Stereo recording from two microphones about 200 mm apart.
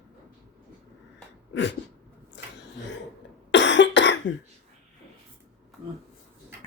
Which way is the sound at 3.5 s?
65° left (ahead or behind).